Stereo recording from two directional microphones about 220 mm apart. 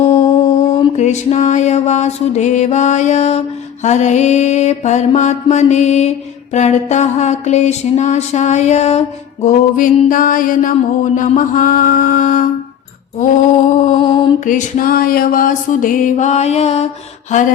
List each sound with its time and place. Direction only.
0.0 s mantra: 30° left (ahead or behind)
0.8 s music: 30° left (ahead or behind)
14.0 s mantra: 20° left (ahead or behind)
14.4 s music: 35° left (ahead or behind)